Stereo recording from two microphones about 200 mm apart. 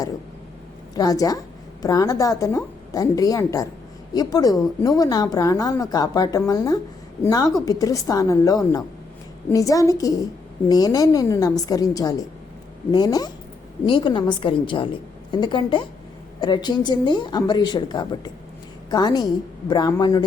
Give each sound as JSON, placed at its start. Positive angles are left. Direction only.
{"t": 0.9, "sound": "a woman's voice", "side_deg": 20}